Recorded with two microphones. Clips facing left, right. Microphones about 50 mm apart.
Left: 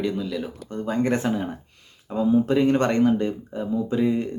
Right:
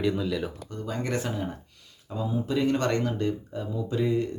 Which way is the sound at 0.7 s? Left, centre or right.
Left.